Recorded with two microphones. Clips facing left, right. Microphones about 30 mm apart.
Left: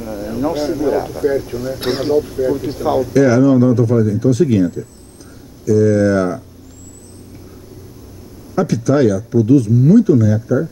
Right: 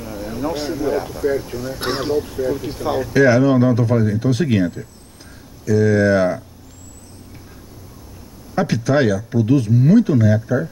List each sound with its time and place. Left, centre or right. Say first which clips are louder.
0.4 s a man's voice: left 5 dB; centre
2.6 s a man's voice: left 5 dB; centre
3.1 s speech: left 1 dB; right
8.5 s speech: left 3 dB; right